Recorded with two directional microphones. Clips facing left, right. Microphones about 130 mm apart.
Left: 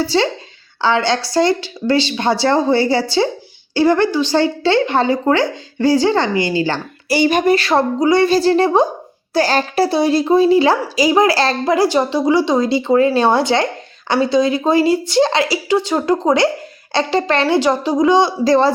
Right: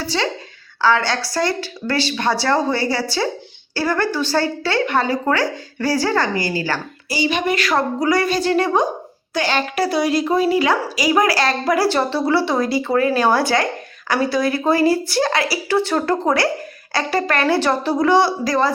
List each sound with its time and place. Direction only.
0.0 s speech: 30° left (ahead or behind)
7.3 s speech: 45° left (ahead or behind)
7.5 s speech: 30° left (ahead or behind)